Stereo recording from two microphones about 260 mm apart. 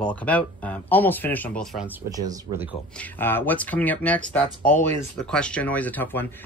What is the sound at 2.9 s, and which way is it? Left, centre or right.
Speech, centre.